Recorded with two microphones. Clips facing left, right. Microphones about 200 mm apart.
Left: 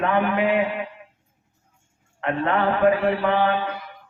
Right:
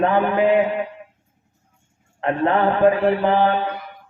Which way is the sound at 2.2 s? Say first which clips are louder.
Right 4 dB; 35° right (ahead or behind).